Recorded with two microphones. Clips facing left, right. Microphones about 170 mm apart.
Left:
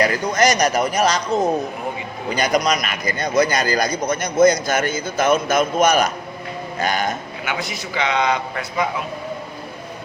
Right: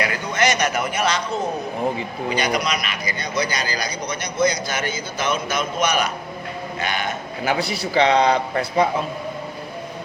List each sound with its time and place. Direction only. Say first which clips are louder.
0.0 s a man's voice: left 4 dB; 40° left (ahead or behind)
2.3 s a man's voice: left 4 dB; 45° left (ahead or behind)
7.4 s a man's voice: right 6 dB; 35° right (ahead or behind)